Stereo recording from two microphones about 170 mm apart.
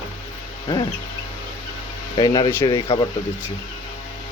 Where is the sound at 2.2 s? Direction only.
20° left (ahead or behind).